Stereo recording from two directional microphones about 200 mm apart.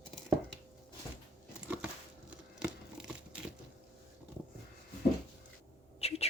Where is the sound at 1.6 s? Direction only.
5° right (ahead or behind).